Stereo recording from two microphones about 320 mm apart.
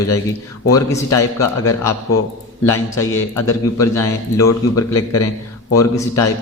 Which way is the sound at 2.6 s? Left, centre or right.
Centre.